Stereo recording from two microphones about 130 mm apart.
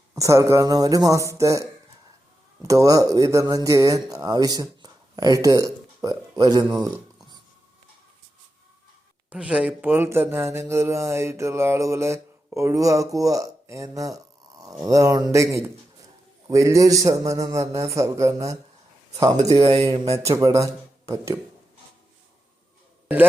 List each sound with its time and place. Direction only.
0.1 s speech: 25° right (ahead or behind)
9.3 s speech: 10° right (ahead or behind); by 21.3 s 25° right (ahead or behind)
23.0 s speech: 15° right (ahead or behind)